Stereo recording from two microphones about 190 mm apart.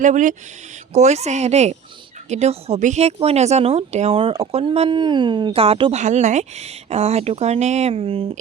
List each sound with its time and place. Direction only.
0.0 s a woman's voice: 40° right (ahead or behind)